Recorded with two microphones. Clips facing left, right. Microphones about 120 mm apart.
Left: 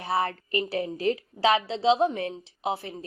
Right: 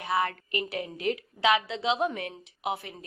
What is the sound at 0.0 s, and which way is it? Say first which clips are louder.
A woman's voice: left 1 dB; 35° left (ahead or behind).